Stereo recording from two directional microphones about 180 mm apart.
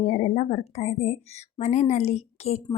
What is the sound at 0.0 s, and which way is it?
Speech, 40° left (ahead or behind).